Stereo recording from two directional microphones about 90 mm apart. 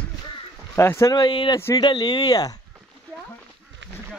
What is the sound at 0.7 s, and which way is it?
Speech, 30° left (ahead or behind).